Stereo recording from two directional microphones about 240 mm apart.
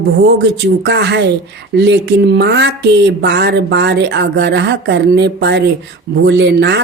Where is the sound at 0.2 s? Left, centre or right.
Right.